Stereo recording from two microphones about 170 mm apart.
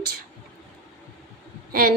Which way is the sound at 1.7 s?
60° right (ahead or behind).